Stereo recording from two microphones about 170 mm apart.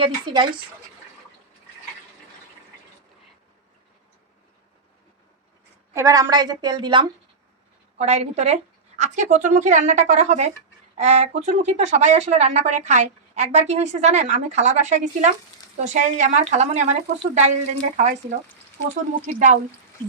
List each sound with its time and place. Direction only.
0.0 s a woman's voice: 25° right (ahead or behind)
5.9 s a woman's voice: 20° right (ahead or behind)
7.9 s a woman's voice: 40° right (ahead or behind)